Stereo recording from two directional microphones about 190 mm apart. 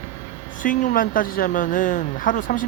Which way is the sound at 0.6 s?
45° left (ahead or behind).